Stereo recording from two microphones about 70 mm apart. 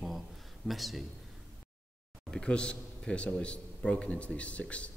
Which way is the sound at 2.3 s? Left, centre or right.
Centre.